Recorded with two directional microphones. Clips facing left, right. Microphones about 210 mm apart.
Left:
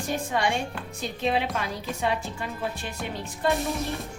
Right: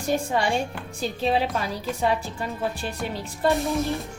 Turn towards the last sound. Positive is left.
turn(degrees=0)  # may be behind; listen again after turning